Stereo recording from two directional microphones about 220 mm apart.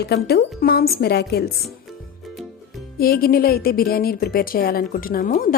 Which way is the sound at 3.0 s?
45° left (ahead or behind).